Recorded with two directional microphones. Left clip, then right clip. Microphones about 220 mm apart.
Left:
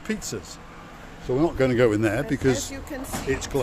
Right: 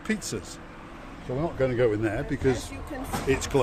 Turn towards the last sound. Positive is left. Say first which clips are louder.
# right 1 dB
turn(degrees=-20)  # may be behind; listen again after turning